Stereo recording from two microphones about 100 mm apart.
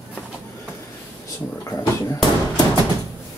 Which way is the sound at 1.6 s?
35° left (ahead or behind).